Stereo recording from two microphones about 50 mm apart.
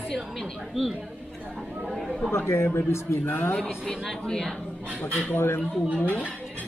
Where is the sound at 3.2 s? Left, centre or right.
Left.